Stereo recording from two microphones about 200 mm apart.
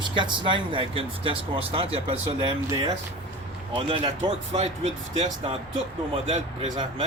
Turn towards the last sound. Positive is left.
turn(degrees=-30)  # may be behind; listen again after turning